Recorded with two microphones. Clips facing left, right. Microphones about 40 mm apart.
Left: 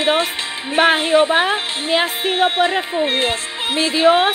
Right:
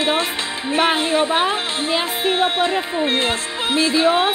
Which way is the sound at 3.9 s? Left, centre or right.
Left.